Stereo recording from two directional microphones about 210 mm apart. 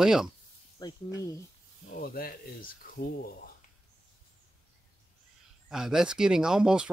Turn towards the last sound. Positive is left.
turn(degrees=-5)  # may be behind; listen again after turning